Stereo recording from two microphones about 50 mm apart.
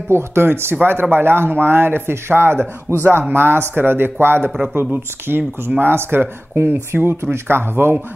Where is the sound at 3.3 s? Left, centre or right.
Right.